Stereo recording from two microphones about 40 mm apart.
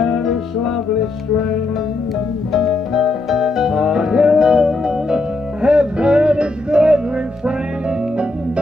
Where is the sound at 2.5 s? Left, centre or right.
Centre; by 8.3 s right.